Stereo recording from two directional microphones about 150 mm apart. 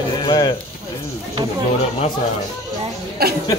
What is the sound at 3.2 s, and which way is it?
Speech, 90° right.